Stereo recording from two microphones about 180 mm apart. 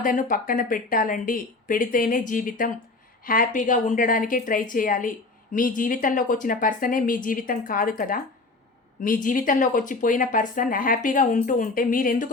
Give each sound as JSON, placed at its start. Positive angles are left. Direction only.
{"t": 0.0, "sound": "speech", "side_deg": 50}